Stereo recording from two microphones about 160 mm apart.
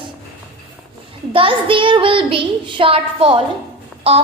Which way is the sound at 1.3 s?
35° right (ahead or behind).